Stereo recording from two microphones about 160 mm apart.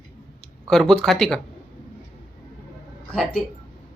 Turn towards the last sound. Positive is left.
turn(degrees=10)  # may be behind; listen again after turning